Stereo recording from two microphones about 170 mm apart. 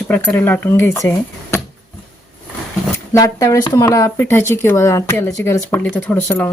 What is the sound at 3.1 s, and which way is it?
Speech, 20° left (ahead or behind).